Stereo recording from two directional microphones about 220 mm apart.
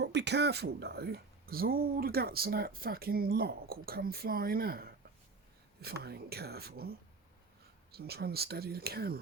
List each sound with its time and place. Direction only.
0.0 s speech: 50° right (ahead or behind)
7.9 s speech: 45° right (ahead or behind)